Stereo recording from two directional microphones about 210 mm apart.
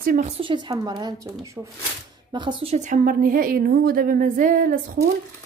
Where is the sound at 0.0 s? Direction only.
40° right (ahead or behind).